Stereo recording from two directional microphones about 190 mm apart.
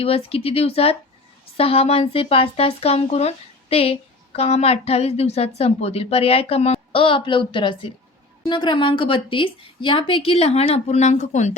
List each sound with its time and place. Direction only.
0.0 s a woman's voice: 30° left (ahead or behind)